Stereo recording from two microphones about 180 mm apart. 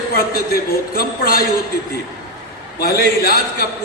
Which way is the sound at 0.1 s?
55° left (ahead or behind).